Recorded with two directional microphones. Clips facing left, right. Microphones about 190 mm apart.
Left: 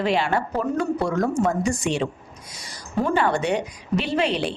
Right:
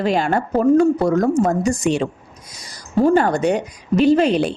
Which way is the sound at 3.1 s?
40° right (ahead or behind).